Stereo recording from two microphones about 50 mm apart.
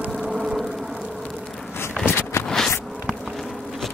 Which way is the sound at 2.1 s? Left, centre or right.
Left.